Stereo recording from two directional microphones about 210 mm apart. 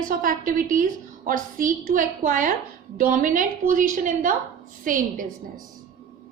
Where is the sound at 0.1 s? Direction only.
40° right (ahead or behind).